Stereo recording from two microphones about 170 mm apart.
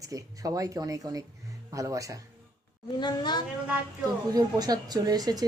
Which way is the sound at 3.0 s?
25° left (ahead or behind).